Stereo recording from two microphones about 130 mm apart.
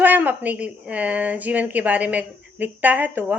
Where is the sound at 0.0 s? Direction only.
15° right (ahead or behind).